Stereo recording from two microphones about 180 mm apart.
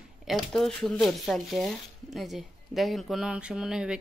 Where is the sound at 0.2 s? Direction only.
Centre (ahead or behind).